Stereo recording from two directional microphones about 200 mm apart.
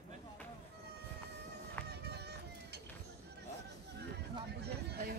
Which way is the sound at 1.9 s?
55° right (ahead or behind).